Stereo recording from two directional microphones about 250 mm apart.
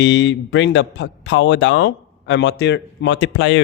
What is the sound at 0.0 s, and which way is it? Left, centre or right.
A man's voice, left.